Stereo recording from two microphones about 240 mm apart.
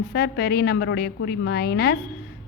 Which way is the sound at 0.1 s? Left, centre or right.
Left.